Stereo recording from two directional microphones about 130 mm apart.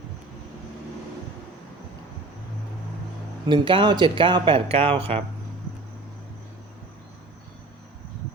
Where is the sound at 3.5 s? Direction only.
40° right (ahead or behind).